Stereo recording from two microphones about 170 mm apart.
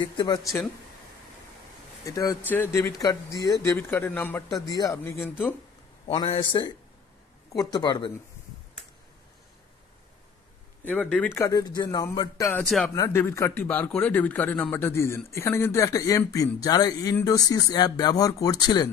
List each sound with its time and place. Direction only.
0.0 s a man's voice: 25° left (ahead or behind)
2.0 s a man's voice: 20° left (ahead or behind)
6.0 s a man's voice: 35° left (ahead or behind)
10.9 s a man's voice: 10° left (ahead or behind)
12.5 s speech: 5° left (ahead or behind)
12.9 s a man's voice: 15° left (ahead or behind)